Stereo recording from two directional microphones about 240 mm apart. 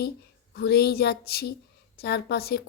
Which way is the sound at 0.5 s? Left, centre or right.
Left.